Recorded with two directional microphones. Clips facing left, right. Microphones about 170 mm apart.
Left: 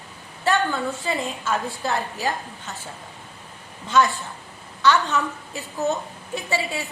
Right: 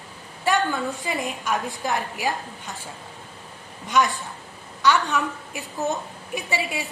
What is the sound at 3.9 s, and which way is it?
A woman's voice, 15° right (ahead or behind).